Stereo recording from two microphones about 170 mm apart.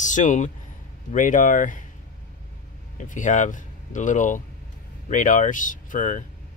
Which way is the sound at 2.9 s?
50° left (ahead or behind).